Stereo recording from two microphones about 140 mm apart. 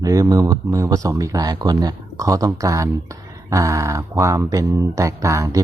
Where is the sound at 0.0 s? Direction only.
25° right (ahead or behind).